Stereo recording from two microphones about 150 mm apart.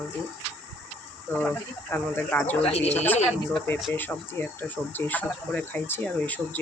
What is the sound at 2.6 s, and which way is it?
Speech, 45° left (ahead or behind).